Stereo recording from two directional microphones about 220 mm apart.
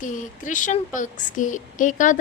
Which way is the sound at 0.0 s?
35° left (ahead or behind).